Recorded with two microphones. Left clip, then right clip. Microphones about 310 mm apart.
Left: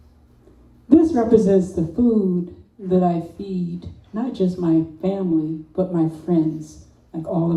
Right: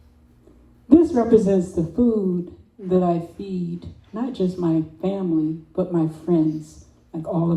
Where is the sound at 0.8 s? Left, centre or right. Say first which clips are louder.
Even; right.